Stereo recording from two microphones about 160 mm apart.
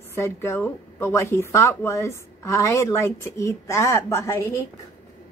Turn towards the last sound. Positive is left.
turn(degrees=15)  # may be behind; listen again after turning